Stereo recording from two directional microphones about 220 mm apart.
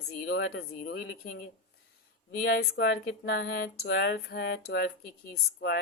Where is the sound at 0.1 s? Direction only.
50° left (ahead or behind).